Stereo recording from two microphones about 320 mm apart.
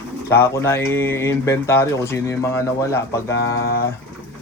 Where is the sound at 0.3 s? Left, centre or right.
Centre.